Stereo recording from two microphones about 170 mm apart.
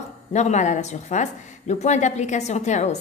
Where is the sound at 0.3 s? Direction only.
40° left (ahead or behind).